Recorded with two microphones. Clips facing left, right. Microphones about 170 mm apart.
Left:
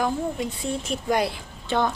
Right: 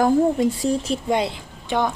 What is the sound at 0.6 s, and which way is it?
A woman's voice, 35° right (ahead or behind).